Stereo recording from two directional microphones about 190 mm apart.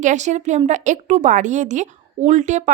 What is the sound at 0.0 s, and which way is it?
Speech, 40° right (ahead or behind).